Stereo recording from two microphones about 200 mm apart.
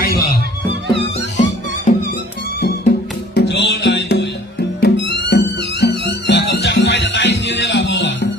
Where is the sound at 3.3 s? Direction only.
55° left (ahead or behind).